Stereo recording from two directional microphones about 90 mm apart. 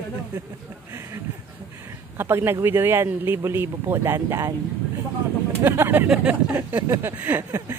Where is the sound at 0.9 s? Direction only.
30° right (ahead or behind).